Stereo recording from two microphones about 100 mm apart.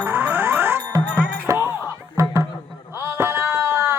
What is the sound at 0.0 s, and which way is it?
Music, 25° right (ahead or behind).